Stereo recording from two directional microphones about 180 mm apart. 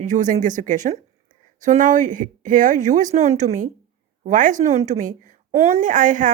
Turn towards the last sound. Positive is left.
turn(degrees=-45)  # may be behind; listen again after turning